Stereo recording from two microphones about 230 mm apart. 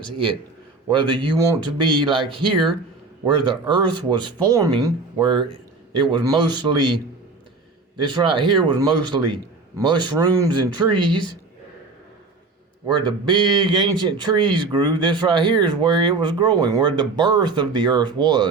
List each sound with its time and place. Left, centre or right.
0.9 s speech: right
8.0 s speech: right
12.9 s speech: centre